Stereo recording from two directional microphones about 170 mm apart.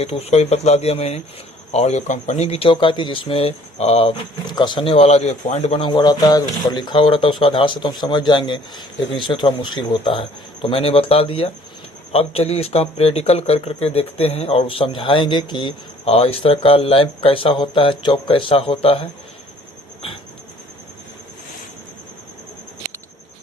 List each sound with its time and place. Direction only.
0.0 s speech: 35° left (ahead or behind)